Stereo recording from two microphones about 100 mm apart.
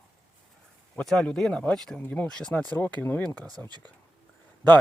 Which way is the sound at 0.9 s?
5° left (ahead or behind).